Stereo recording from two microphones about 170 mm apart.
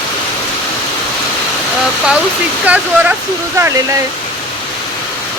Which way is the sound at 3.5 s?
15° right (ahead or behind).